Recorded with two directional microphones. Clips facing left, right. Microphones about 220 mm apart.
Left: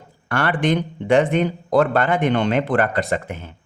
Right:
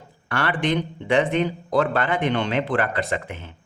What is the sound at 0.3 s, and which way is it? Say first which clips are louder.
A man's voice: left 3 dB; 45° left (ahead or behind).